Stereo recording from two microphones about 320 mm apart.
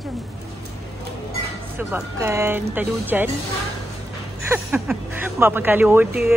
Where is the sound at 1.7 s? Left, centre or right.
Centre.